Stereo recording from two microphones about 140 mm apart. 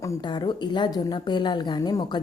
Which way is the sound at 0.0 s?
30° left (ahead or behind).